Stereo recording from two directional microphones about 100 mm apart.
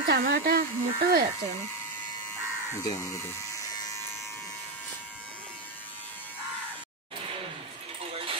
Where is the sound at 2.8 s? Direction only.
35° left (ahead or behind).